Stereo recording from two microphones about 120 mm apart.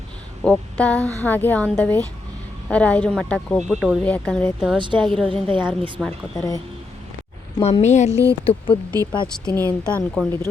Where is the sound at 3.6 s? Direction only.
5° right (ahead or behind).